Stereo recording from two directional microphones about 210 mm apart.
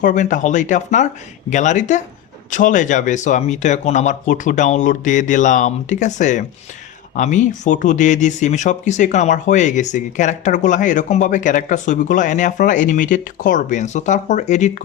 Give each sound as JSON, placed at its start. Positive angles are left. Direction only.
{"t": 0.0, "sound": "speech", "side_deg": 35}